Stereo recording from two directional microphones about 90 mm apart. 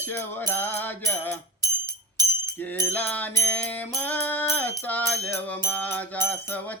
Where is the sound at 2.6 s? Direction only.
20° left (ahead or behind).